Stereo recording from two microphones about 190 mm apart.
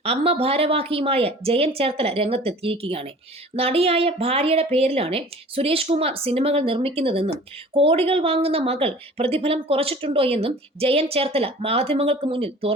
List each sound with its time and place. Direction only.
0.0 s speech: 30° right (ahead or behind)